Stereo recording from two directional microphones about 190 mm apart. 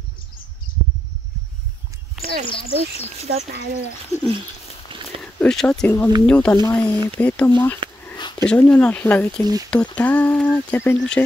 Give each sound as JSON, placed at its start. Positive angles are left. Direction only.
{"t": 2.4, "sound": "a child's voice", "side_deg": 25}
{"t": 3.3, "sound": "speech", "side_deg": -60}
{"t": 4.1, "sound": "speech", "side_deg": 40}
{"t": 4.9, "sound": "walk", "side_deg": -25}
{"t": 5.2, "sound": "speech", "side_deg": 5}
{"t": 8.2, "sound": "dog", "side_deg": 25}
{"t": 8.5, "sound": "speech", "side_deg": 5}